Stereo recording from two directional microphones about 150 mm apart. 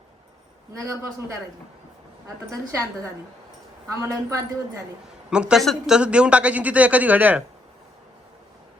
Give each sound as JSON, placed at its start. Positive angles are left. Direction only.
{"t": 0.7, "sound": "a woman's voice", "side_deg": -20}
{"t": 2.2, "sound": "a woman's voice", "side_deg": -20}
{"t": 5.3, "sound": "speech", "side_deg": -5}